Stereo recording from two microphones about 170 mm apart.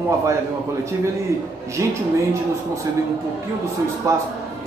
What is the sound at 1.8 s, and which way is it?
Speech, 20° right (ahead or behind).